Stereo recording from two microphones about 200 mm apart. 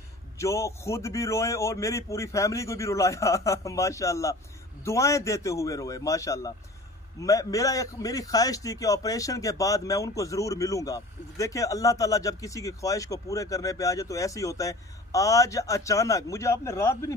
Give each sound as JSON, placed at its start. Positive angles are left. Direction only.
{"t": 0.4, "sound": "a man's voice", "side_deg": 15}